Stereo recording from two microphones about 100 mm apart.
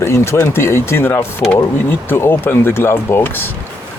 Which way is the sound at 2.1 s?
25° left (ahead or behind).